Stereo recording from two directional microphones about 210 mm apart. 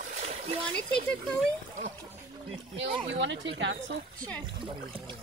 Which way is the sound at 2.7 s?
60° right (ahead or behind).